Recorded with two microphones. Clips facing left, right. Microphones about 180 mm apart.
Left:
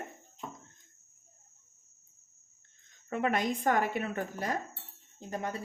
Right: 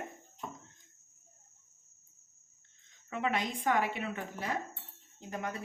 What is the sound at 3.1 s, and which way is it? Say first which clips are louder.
A woman's voice: left 4 dB; 50° left (ahead or behind).